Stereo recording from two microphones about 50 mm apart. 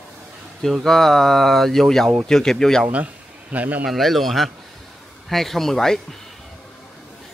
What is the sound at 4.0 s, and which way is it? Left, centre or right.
Speech, centre.